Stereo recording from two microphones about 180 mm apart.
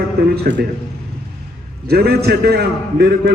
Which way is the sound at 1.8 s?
60° right (ahead or behind).